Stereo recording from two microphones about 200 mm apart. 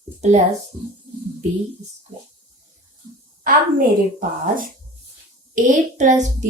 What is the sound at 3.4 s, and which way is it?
A woman's voice, 45° right (ahead or behind).